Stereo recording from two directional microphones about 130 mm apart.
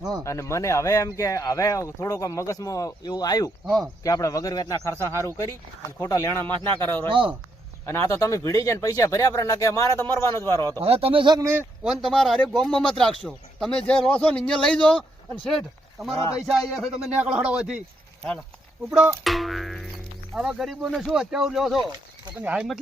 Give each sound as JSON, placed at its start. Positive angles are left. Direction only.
{"t": 0.3, "sound": "speech", "side_deg": 20}
{"t": 7.1, "sound": "speech", "side_deg": -40}
{"t": 7.9, "sound": "speech", "side_deg": 20}
{"t": 10.8, "sound": "speech", "side_deg": -50}
{"t": 11.3, "sound": "a man's voice", "side_deg": -20}
{"t": 11.8, "sound": "speech", "side_deg": 0}
{"t": 16.3, "sound": "a man's voice", "side_deg": -5}
{"t": 19.2, "sound": "a man's voice", "side_deg": 0}
{"t": 22.4, "sound": "speech", "side_deg": -10}